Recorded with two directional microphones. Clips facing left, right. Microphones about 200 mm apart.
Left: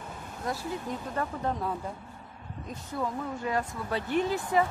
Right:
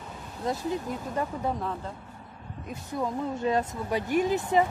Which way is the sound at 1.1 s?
10° right (ahead or behind).